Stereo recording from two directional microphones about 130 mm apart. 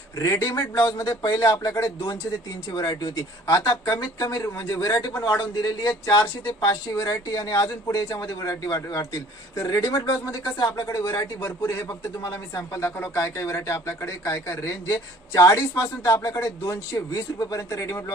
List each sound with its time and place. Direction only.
0.2 s speech: 25° left (ahead or behind)
2.6 s speech: 35° left (ahead or behind)